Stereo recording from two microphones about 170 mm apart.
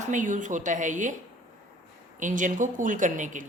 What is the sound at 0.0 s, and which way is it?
A woman's voice, 50° right (ahead or behind).